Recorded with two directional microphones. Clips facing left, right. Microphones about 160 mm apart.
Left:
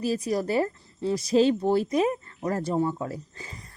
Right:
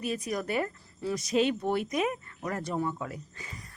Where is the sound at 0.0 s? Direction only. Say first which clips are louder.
Left 6 dB; 30° left (ahead or behind).